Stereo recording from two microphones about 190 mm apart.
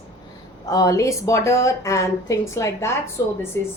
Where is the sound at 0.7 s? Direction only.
15° left (ahead or behind).